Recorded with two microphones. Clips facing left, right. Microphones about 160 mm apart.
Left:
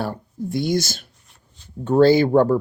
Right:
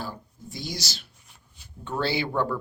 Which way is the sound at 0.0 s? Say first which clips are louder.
Left 10 dB; 60° left (ahead or behind).